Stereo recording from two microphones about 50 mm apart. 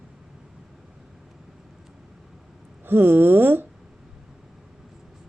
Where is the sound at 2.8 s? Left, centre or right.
Right.